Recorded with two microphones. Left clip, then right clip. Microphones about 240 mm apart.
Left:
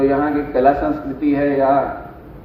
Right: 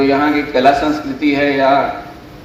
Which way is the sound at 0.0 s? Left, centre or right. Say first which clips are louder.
Right 3 dB; right.